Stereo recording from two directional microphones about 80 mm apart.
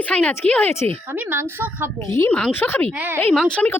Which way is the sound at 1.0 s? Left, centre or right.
Right.